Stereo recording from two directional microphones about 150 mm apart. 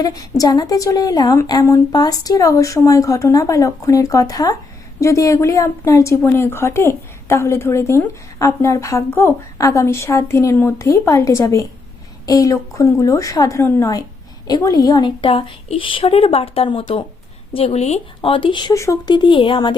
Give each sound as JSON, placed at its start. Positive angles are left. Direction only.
{"t": 0.0, "sound": "a woman's voice", "side_deg": 25}